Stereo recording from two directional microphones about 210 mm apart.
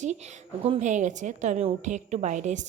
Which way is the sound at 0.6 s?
30° right (ahead or behind).